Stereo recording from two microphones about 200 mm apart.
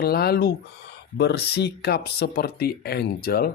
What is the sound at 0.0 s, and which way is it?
Speech, 50° left (ahead or behind).